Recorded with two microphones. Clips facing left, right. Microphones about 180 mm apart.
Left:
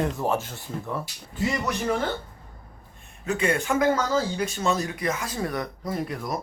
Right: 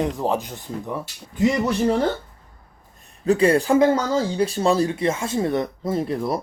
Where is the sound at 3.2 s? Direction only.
35° right (ahead or behind).